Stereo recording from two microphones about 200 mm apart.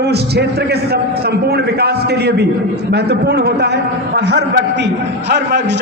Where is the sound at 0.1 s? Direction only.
55° right (ahead or behind).